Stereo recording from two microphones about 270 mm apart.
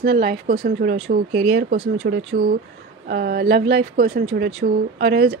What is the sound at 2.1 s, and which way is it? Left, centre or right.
Speech, right.